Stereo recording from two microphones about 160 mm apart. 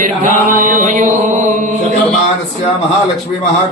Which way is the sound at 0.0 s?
55° right (ahead or behind).